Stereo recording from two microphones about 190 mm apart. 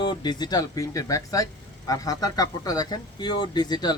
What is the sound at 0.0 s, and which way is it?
Speech, 25° left (ahead or behind).